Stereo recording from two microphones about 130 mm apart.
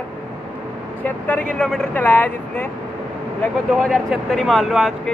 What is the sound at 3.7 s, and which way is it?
Speech, centre (ahead or behind).